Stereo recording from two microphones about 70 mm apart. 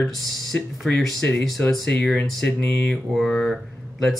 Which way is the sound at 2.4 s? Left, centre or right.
Centre.